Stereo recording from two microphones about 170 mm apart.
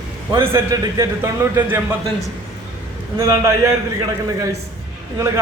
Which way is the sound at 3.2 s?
20° right (ahead or behind).